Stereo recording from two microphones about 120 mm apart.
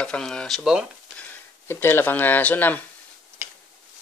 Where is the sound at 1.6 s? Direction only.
20° left (ahead or behind).